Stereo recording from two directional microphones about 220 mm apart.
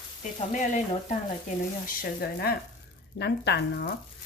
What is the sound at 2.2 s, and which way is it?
Speech, 45° left (ahead or behind).